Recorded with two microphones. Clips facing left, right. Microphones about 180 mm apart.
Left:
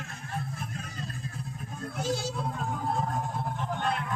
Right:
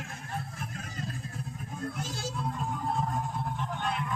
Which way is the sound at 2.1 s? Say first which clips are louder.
Left 2 dB; centre (ahead or behind).